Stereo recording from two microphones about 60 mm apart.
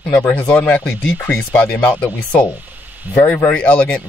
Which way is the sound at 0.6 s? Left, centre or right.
Left.